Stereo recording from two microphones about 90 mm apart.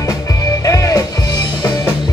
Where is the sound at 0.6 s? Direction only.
40° left (ahead or behind).